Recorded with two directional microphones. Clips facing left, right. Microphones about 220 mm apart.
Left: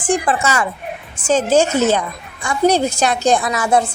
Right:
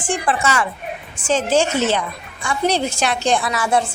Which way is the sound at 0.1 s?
40° left (ahead or behind).